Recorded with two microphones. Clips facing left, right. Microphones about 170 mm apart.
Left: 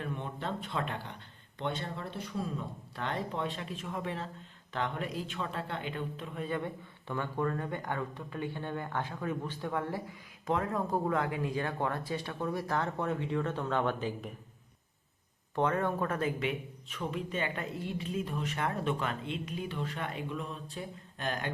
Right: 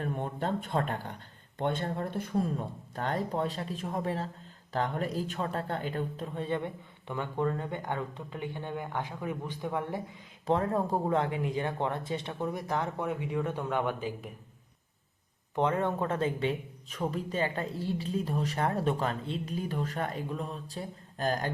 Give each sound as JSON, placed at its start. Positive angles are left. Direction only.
{"t": 0.0, "sound": "speech", "side_deg": -45}
{"t": 10.4, "sound": "speech", "side_deg": -30}
{"t": 15.5, "sound": "speech", "side_deg": -20}